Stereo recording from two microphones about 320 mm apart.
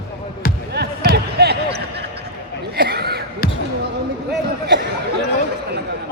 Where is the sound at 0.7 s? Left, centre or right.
Right.